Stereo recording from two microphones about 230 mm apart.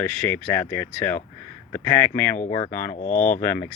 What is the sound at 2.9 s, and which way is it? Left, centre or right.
Speech, left.